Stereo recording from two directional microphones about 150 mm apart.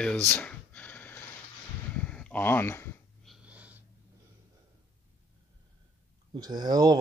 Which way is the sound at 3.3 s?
10° right (ahead or behind).